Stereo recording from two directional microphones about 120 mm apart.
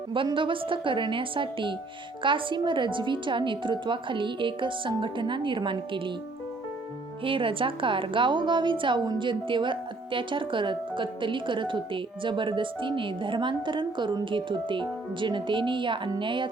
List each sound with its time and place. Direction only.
0.1 s a woman's voice: 45° right (ahead or behind)
7.3 s a woman's voice: 45° right (ahead or behind)